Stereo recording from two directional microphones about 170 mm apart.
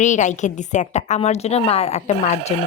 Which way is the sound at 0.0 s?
45° left (ahead or behind).